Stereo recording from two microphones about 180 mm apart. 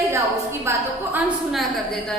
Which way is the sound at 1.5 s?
Centre (ahead or behind).